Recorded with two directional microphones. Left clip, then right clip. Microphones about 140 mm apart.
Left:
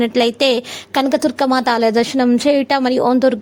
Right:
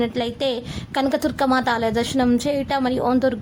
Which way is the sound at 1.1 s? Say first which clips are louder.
Left 4 dB; 25° left (ahead or behind).